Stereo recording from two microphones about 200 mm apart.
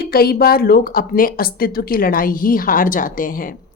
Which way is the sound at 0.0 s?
50° left (ahead or behind).